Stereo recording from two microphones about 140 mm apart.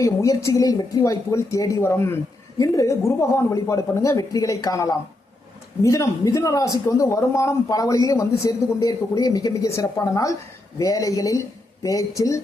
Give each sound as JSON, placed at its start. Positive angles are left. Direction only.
{"t": 0.0, "sound": "a man's voice", "side_deg": 25}